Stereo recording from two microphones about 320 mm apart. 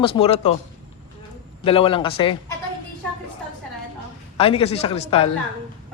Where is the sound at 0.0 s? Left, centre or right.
Centre.